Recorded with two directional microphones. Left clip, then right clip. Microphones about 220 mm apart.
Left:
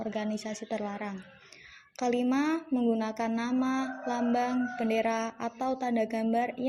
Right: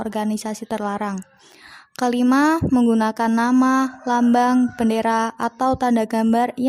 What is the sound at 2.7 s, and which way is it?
Speech, 40° right (ahead or behind).